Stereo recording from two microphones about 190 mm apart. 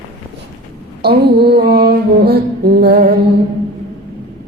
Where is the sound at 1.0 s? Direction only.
60° right (ahead or behind).